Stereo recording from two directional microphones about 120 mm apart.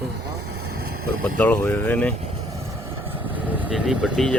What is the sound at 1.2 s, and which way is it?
Speech, 15° left (ahead or behind).